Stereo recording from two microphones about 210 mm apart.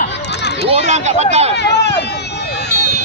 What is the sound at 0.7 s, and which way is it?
Speech, 35° right (ahead or behind).